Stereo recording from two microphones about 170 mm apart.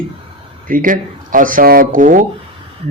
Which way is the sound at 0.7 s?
50° right (ahead or behind).